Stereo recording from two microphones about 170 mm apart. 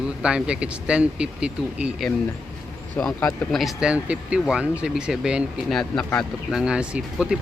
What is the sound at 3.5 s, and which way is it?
Speech, centre (ahead or behind).